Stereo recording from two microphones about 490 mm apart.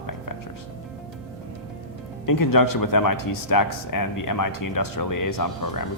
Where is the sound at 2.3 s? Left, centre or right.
Left.